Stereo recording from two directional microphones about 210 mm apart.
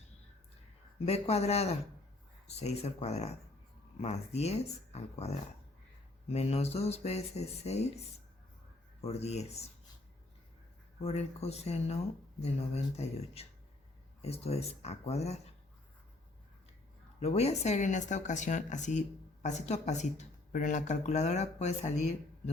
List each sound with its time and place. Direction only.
1.0 s speech: 30° left (ahead or behind)
11.0 s speech: 30° left (ahead or behind)
17.2 s speech: 30° left (ahead or behind)